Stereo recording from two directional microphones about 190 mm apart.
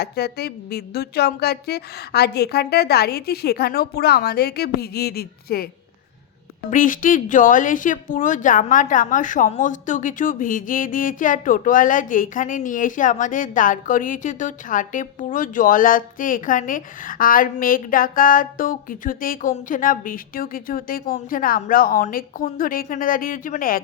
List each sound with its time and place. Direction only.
0.0 s a woman's voice: 55° left (ahead or behind)
6.7 s a woman's voice: 45° left (ahead or behind)